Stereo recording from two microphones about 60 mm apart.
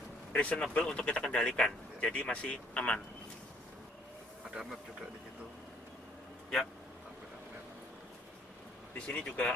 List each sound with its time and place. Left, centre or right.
0.3 s speech: centre
8.9 s speech: left